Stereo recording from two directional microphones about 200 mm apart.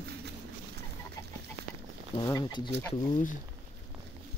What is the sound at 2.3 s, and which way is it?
Speech, 20° left (ahead or behind).